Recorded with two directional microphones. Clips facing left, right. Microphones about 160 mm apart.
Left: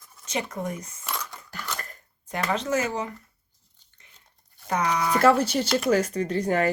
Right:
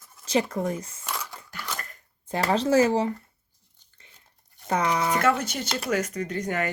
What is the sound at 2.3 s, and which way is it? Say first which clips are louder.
Speech: right 5 dB; 35° right (ahead or behind).